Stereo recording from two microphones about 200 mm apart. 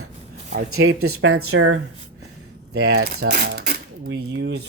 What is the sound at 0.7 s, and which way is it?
Speech, 90° right.